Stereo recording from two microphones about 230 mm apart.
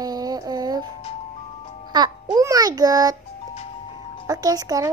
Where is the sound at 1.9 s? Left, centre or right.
Centre.